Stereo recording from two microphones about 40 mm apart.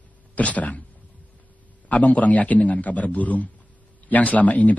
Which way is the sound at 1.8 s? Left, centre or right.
Left.